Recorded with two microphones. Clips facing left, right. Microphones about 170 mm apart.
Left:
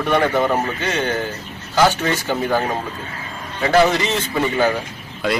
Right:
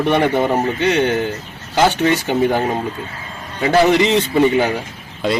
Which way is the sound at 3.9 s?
15° right (ahead or behind).